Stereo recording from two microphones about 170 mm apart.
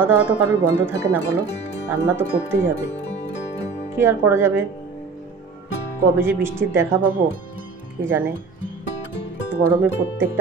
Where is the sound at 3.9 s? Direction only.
15° right (ahead or behind).